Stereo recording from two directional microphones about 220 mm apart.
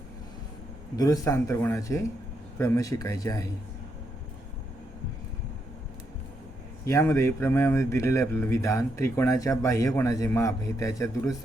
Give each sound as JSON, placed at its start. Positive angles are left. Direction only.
{"t": 0.9, "sound": "speech", "side_deg": 15}
{"t": 6.8, "sound": "speech", "side_deg": 15}